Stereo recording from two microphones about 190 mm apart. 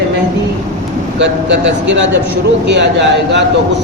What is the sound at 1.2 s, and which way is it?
A man's voice, 70° right (ahead or behind).